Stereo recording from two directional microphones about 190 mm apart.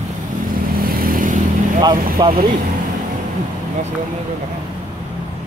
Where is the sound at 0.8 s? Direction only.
50° right (ahead or behind).